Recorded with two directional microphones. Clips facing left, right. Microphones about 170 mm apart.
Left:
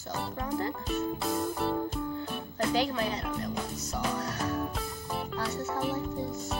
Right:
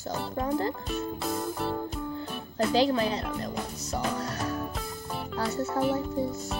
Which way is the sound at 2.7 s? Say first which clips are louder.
Right 6 dB; 30° right (ahead or behind).